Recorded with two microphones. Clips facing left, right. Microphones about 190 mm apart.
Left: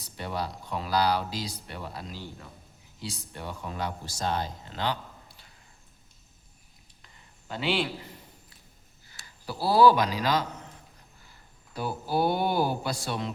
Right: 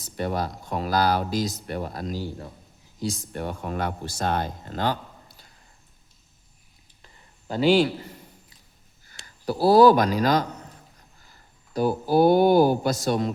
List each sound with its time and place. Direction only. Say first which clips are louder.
0.0 s speech: right 6 dB; 45° right (ahead or behind)
7.4 s a man's voice: right 10 dB; 40° right (ahead or behind)
9.0 s speech: right 10 dB; 45° right (ahead or behind)
11.7 s speech: right 8 dB; 45° right (ahead or behind)